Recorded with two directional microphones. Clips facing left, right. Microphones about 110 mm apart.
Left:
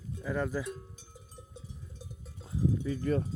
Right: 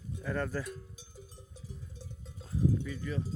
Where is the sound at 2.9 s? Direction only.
45° left (ahead or behind).